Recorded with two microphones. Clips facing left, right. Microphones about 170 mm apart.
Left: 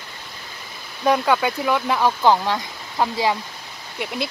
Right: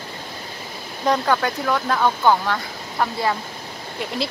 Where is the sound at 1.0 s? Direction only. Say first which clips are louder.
Left 1 dB; 10° left (ahead or behind).